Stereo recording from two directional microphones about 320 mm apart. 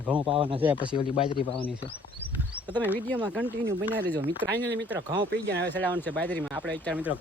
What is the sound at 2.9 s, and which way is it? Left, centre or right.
Speech, centre.